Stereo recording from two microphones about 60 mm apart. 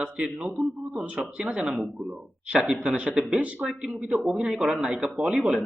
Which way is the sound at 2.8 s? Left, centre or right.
Centre.